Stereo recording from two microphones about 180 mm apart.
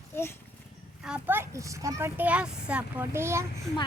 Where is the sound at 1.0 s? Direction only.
10° right (ahead or behind).